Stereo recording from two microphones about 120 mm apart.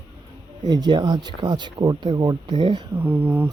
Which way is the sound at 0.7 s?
35° right (ahead or behind).